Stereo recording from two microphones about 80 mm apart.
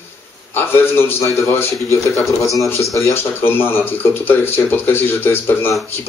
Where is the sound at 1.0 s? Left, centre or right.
Left.